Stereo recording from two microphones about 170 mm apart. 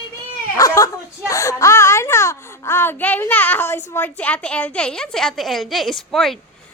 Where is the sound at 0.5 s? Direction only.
20° left (ahead or behind).